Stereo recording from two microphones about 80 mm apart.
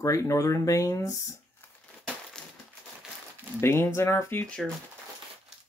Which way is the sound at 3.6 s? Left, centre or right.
Left.